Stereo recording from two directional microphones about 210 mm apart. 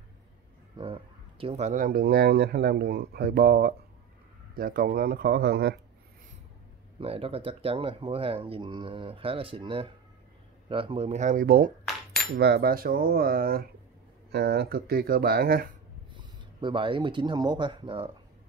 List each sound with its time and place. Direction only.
0.7 s speech: 25° right (ahead or behind); by 5.8 s 50° right (ahead or behind)
7.0 s speech: 25° right (ahead or behind); by 15.7 s 45° right (ahead or behind)
16.1 s speech: 25° right (ahead or behind)